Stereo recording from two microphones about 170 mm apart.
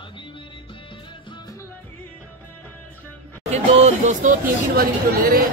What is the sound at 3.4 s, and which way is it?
Speech, 40° right (ahead or behind).